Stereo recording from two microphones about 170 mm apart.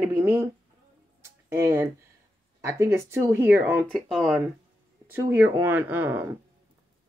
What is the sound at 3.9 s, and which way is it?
Speech, centre (ahead or behind).